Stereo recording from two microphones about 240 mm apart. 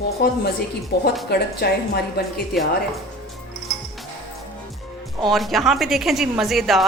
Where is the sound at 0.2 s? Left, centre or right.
Left.